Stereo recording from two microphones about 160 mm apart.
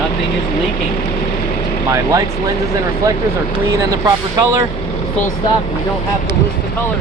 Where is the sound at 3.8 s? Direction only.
20° right (ahead or behind).